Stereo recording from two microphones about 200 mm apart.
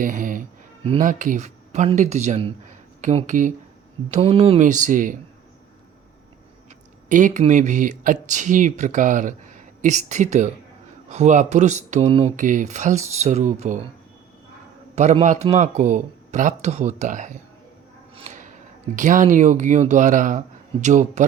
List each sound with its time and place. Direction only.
0.0 s music: 40° right (ahead or behind)
1.0 s speech: 40° right (ahead or behind)
4.1 s speech: 30° right (ahead or behind)
7.1 s speech: 40° right (ahead or behind)
14.9 s speech: 35° right (ahead or behind)
18.9 s speech: 40° right (ahead or behind)